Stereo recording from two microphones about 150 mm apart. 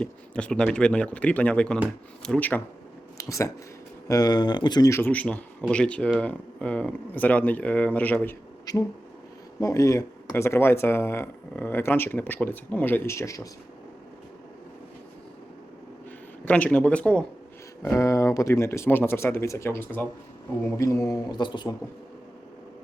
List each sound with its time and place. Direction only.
0.0 s speech: 5° left (ahead or behind)
3.2 s speech: 20° left (ahead or behind)
8.7 s a man's voice: 25° left (ahead or behind)
16.5 s speech: 10° left (ahead or behind)
17.8 s a man's voice: 20° left (ahead or behind)